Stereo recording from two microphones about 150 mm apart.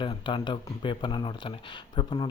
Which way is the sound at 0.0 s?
35° left (ahead or behind).